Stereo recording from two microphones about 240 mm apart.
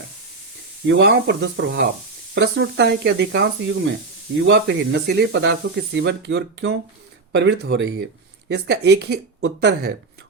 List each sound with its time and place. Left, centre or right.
0.9 s speech: right